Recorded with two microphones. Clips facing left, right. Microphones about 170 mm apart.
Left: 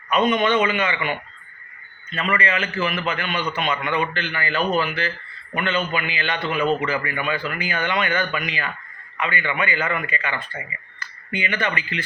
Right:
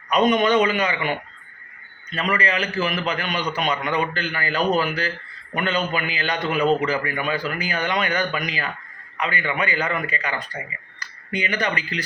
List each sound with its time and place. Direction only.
0.1 s speech: 40° right (ahead or behind)